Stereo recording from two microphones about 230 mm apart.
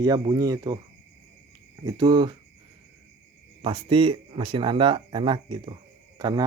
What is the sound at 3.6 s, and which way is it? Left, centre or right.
A man's voice, right.